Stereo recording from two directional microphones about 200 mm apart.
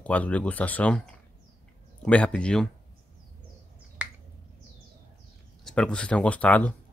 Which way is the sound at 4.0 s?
5° right (ahead or behind).